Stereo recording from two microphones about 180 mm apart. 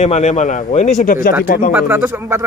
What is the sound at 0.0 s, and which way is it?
Speech, 40° left (ahead or behind).